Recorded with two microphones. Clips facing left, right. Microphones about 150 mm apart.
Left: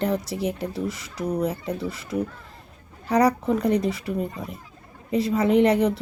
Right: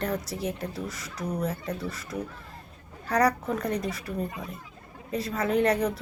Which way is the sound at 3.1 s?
10° left (ahead or behind).